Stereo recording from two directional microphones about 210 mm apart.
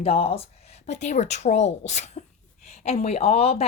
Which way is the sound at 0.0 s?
30° left (ahead or behind).